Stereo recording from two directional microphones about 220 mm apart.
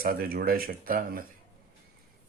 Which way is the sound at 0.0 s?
40° right (ahead or behind).